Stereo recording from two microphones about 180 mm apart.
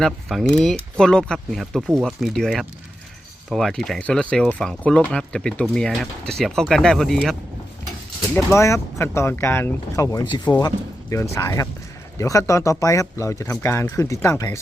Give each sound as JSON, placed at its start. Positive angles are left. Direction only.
{"t": 0.0, "sound": "speech", "side_deg": 0}